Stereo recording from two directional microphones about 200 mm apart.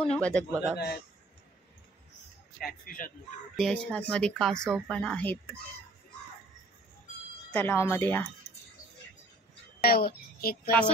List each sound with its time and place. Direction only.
0.2 s speech: 5° left (ahead or behind)
0.5 s a man's voice: 10° right (ahead or behind)
0.7 s a man's voice: 55° left (ahead or behind)
2.6 s a man's voice: 45° left (ahead or behind)
3.5 s speech: 5° left (ahead or behind)
7.5 s speech: 10° left (ahead or behind)
9.8 s speech: 50° left (ahead or behind)